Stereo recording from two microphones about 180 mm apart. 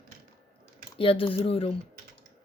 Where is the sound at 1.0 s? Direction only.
30° left (ahead or behind).